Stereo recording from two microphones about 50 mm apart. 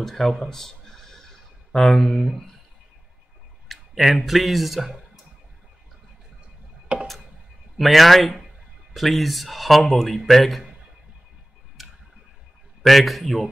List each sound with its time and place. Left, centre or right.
0.0 s a sound: centre
2.2 s speech: centre
3.6 s speech: centre
6.9 s tick-tock: right
7.7 s speech: centre
11.8 s tick-tock: centre
12.8 s speech: centre